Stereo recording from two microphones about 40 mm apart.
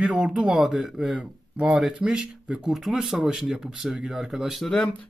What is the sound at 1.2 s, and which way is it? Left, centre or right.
Speech, right.